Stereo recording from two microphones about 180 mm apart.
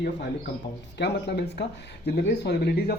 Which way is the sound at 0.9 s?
70° left (ahead or behind).